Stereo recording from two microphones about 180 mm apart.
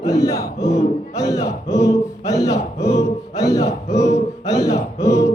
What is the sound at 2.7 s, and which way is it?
Music, 35° left (ahead or behind).